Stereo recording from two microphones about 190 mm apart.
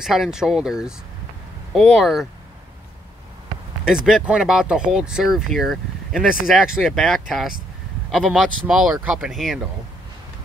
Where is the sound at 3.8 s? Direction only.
5° right (ahead or behind).